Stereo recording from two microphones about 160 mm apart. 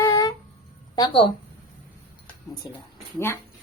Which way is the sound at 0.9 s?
30° left (ahead or behind).